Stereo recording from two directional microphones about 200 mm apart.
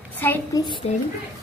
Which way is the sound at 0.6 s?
25° left (ahead or behind).